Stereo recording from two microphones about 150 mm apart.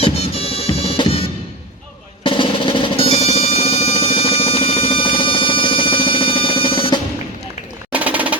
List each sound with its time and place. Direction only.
0.0 s music: 40° left (ahead or behind)
2.2 s drum: 35° left (ahead or behind)
7.9 s a sound: 10° right (ahead or behind)